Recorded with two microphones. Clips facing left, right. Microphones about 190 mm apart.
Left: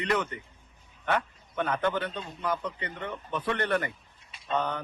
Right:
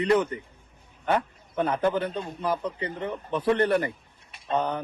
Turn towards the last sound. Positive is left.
turn(degrees=-30)  # may be behind; listen again after turning